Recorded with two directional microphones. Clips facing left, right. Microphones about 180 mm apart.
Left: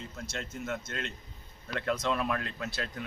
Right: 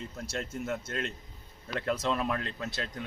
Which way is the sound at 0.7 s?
35° right (ahead or behind).